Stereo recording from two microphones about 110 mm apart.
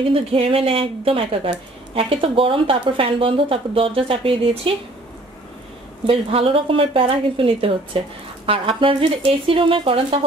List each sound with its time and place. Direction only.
0.1 s speech: 60° right (ahead or behind)
6.0 s speech: 55° right (ahead or behind)